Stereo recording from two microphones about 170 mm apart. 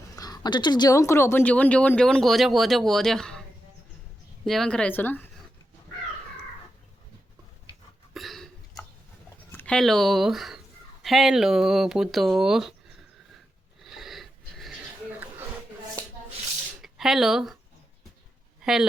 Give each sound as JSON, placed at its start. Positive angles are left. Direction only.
{"t": 0.2, "sound": "speech", "side_deg": 25}
{"t": 4.4, "sound": "speech", "side_deg": 0}
{"t": 8.1, "sound": "hiccup", "side_deg": 0}
{"t": 9.5, "sound": "speech", "side_deg": 10}
{"t": 13.8, "sound": "a sound", "side_deg": 0}
{"t": 16.8, "sound": "speech", "side_deg": 0}
{"t": 18.6, "sound": "a woman's voice", "side_deg": -5}